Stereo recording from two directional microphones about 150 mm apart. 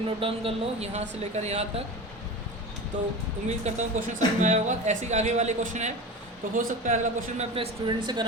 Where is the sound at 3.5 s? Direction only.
50° right (ahead or behind).